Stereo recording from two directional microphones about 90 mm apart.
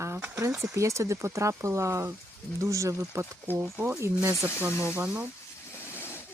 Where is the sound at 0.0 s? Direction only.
30° right (ahead or behind).